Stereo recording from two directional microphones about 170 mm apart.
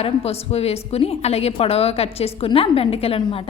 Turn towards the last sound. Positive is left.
turn(degrees=35)  # may be behind; listen again after turning